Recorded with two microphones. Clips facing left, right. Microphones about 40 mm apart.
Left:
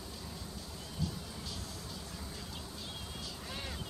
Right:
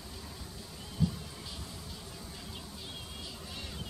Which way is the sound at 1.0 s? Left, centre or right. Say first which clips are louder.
Right 7 dB; centre.